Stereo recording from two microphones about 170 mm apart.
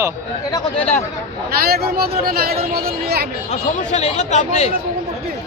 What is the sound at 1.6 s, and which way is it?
Speech, 65° right (ahead or behind).